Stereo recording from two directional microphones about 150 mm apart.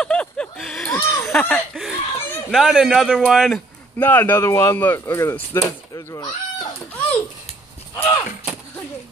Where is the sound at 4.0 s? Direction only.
15° left (ahead or behind).